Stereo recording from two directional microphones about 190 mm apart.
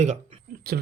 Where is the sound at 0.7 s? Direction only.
55° right (ahead or behind).